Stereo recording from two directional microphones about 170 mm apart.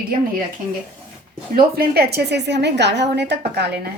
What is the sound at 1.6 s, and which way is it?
A woman's voice, 65° right (ahead or behind).